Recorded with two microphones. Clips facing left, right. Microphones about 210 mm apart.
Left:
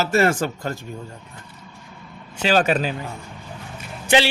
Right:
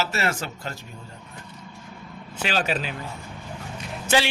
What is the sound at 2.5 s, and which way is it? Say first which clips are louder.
Speech: left 7 dB; 50° left (ahead or behind).